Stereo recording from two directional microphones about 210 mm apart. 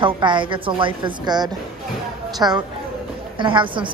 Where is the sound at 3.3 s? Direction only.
25° right (ahead or behind).